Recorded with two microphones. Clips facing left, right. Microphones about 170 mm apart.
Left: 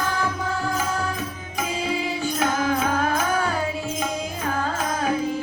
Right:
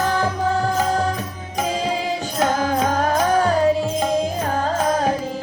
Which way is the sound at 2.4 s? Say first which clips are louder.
Right 4 dB; 35° right (ahead or behind).